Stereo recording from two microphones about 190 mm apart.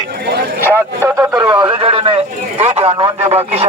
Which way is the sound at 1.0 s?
15° right (ahead or behind).